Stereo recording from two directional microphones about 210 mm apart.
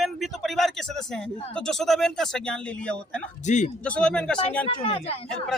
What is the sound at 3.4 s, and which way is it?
Speech, 35° left (ahead or behind).